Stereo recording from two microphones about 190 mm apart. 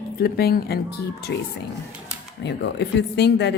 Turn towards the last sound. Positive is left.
turn(degrees=60)  # may be behind; listen again after turning